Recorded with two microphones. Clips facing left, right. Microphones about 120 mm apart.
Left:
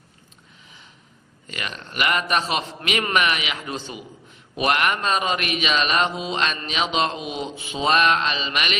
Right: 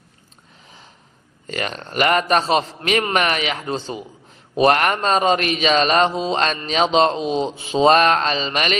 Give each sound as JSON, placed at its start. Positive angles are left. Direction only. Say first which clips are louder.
{"t": 1.5, "sound": "a man's voice", "louder": "right 7 dB", "side_deg": -40}